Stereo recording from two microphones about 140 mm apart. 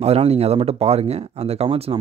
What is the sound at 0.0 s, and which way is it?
Speech, 45° right (ahead or behind).